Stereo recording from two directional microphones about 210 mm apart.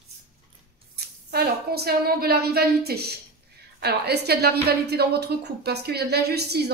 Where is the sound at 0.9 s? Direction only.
50° right (ahead or behind).